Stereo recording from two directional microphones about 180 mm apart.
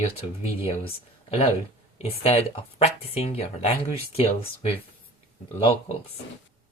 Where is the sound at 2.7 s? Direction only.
35° left (ahead or behind).